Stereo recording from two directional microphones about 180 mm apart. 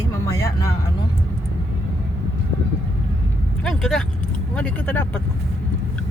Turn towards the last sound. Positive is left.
turn(degrees=10)  # may be behind; listen again after turning